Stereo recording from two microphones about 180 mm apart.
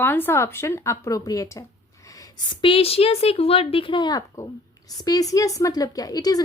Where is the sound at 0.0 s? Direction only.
10° left (ahead or behind).